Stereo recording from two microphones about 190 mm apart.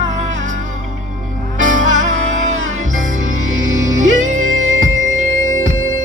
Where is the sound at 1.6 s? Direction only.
45° right (ahead or behind).